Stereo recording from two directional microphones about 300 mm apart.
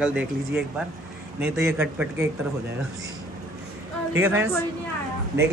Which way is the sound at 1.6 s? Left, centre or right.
Centre.